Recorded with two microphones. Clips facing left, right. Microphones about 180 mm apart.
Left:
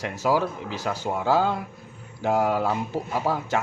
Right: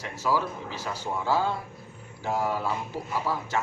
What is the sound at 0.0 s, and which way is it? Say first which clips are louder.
Speech: left 4 dB; 60° left (ahead or behind).